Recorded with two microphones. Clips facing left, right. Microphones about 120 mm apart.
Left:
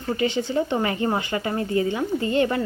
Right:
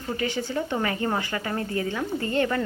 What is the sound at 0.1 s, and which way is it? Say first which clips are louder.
Speech: left 5 dB; 20° left (ahead or behind).